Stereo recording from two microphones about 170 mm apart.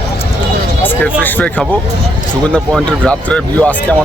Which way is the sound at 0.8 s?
10° left (ahead or behind).